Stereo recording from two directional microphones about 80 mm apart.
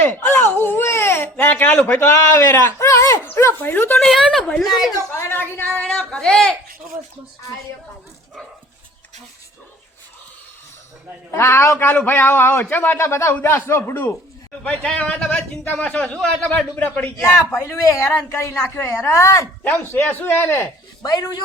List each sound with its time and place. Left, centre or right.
0.0 s a sound: left
3.2 s speech: left
4.0 s a woman's voice: centre
5.1 s speech: left
6.1 s speech: centre
11.3 s a woman's voice: left
14.6 s speech: centre
17.5 s a woman's voice: left
19.6 s speech: left
21.0 s speech: left